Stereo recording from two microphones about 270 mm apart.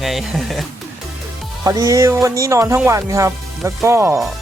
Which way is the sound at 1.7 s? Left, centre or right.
Centre.